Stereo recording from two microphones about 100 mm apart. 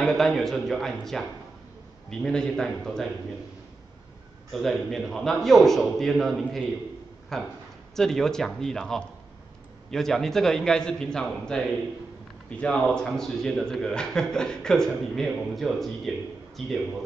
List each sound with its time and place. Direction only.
0.0 s a man's voice: 5° left (ahead or behind)
4.5 s a man's voice: centre (ahead or behind)